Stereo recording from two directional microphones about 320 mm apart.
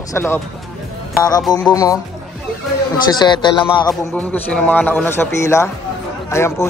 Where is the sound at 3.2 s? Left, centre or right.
Centre.